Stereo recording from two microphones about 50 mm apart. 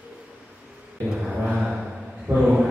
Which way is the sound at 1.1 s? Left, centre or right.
Centre.